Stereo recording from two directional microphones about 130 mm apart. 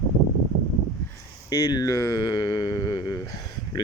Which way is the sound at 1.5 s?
30° left (ahead or behind).